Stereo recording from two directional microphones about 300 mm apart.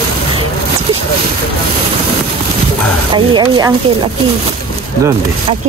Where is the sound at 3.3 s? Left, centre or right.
Centre.